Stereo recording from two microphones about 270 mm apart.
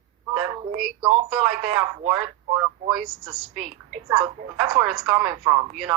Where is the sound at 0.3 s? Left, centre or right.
Centre.